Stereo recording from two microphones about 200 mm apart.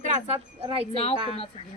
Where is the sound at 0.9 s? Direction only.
30° left (ahead or behind).